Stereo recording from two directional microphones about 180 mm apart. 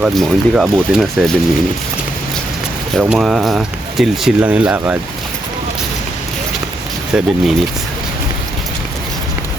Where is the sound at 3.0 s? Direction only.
Centre (ahead or behind).